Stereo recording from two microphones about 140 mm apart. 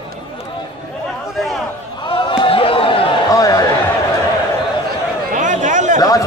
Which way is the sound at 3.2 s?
25° left (ahead or behind).